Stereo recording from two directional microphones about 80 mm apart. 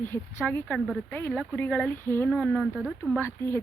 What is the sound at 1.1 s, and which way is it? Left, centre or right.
Speech, left.